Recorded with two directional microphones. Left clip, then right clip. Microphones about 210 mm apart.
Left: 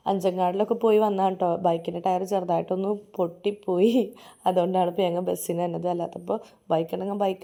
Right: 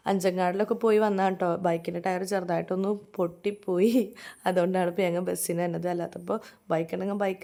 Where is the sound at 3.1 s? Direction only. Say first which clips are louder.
Left 3 dB; 35° right (ahead or behind).